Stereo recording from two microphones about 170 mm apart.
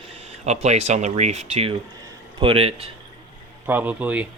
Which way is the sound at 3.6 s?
10° right (ahead or behind).